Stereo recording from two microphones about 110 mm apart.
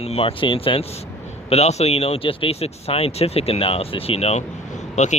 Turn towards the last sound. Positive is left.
turn(degrees=90)